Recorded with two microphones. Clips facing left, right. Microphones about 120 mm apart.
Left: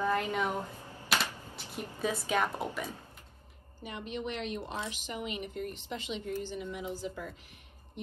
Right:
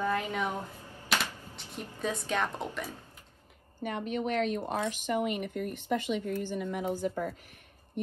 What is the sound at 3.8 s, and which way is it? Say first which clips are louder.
Speech: right 5 dB; 50° right (ahead or behind).